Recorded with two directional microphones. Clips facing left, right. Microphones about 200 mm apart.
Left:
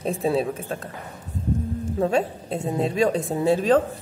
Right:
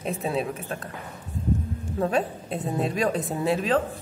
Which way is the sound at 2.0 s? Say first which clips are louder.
Left 2 dB; 25° left (ahead or behind).